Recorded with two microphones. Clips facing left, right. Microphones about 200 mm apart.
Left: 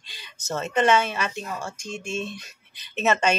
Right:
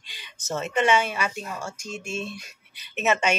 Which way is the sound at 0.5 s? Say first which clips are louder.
Left 1 dB; 15° right (ahead or behind).